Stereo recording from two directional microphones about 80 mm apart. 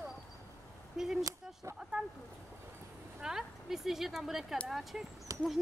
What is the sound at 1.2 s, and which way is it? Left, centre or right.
Speech, right.